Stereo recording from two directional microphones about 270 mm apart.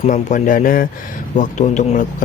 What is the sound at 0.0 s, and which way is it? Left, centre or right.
A man's voice, left.